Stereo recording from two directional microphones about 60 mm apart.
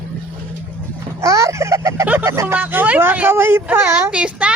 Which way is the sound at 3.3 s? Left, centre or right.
Right.